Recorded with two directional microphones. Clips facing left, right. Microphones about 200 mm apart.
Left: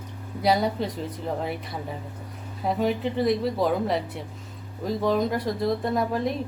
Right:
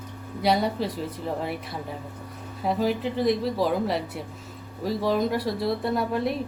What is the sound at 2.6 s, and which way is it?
A woman's voice, centre (ahead or behind).